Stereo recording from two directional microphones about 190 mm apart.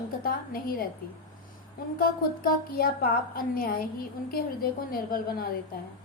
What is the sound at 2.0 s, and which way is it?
A woman's voice, 50° left (ahead or behind).